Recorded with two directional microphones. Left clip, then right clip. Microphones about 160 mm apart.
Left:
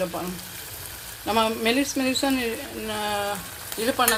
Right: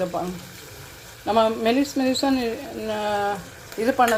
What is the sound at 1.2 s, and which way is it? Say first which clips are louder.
Speech: right 3 dB; centre (ahead or behind).